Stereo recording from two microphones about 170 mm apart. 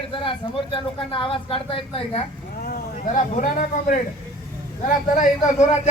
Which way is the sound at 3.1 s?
50° left (ahead or behind).